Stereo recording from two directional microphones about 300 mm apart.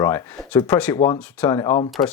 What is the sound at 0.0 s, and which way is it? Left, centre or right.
Speech, centre.